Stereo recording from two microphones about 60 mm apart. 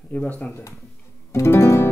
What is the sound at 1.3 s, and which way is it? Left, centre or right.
Music, left.